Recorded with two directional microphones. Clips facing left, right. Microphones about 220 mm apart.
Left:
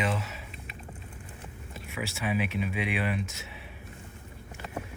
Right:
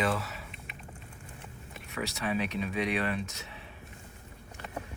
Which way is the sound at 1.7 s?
10° left (ahead or behind).